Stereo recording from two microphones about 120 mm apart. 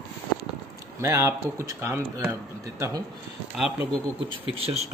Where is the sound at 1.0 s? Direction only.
25° right (ahead or behind).